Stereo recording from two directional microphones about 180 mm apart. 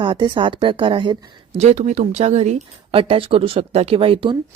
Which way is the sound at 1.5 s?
40° right (ahead or behind).